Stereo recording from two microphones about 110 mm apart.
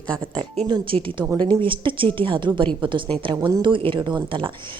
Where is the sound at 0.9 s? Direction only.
65° right (ahead or behind).